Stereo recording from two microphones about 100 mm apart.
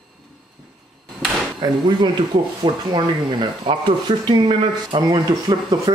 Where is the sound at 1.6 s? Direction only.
45° right (ahead or behind).